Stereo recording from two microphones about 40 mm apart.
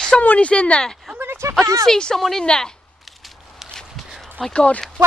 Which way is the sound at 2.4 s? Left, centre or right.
Centre.